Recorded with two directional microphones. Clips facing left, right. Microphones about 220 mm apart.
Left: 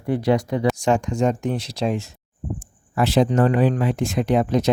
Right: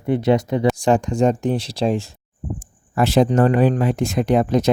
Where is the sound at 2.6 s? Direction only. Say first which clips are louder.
Right 2 dB; 45° right (ahead or behind).